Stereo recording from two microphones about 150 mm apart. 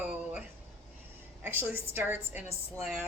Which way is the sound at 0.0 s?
10° right (ahead or behind).